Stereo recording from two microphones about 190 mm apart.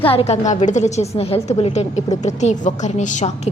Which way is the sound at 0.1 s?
30° left (ahead or behind).